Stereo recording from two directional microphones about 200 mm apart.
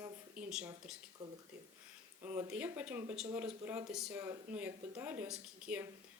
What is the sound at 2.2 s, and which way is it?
Speech, 10° right (ahead or behind).